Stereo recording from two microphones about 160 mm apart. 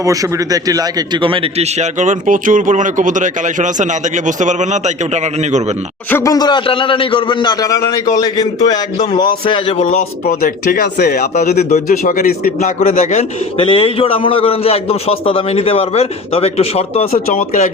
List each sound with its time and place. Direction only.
0.0 s a man's voice: 20° right (ahead or behind); by 5.6 s 45° right (ahead or behind)
6.1 s a man's voice: 15° left (ahead or behind); by 10.0 s 40° left (ahead or behind)
10.0 s speech: 65° left (ahead or behind)
11.7 s speech: 55° left (ahead or behind)
12.5 s a man's voice: 50° left (ahead or behind)
17.3 s speech: 50° left (ahead or behind)